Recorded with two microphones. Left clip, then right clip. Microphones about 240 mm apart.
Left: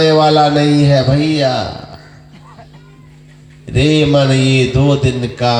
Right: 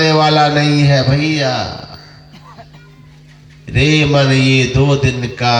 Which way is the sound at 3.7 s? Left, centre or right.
Right.